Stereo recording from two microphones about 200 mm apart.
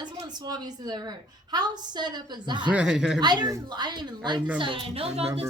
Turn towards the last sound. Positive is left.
turn(degrees=-30)  # may be behind; listen again after turning